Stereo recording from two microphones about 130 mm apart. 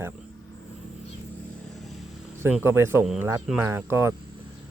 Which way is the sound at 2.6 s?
20° right (ahead or behind).